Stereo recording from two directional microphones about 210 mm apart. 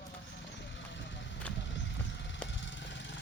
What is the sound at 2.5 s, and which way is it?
Vehicle, 60° left (ahead or behind).